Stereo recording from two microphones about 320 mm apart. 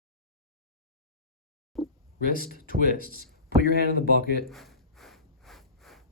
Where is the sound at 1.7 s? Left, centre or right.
Centre.